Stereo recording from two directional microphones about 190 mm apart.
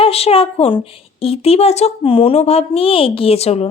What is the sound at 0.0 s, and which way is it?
A woman's voice, 30° left (ahead or behind).